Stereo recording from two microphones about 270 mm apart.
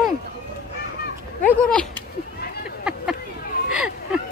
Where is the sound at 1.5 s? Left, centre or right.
Centre.